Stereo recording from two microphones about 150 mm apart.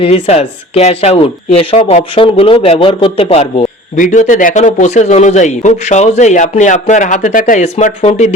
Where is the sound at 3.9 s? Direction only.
60° left (ahead or behind).